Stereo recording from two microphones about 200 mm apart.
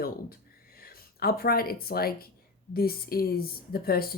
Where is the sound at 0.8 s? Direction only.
50° left (ahead or behind).